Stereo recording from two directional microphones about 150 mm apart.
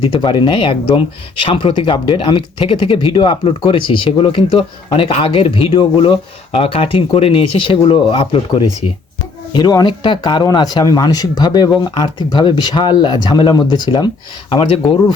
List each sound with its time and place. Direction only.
0.1 s speech: 30° left (ahead or behind)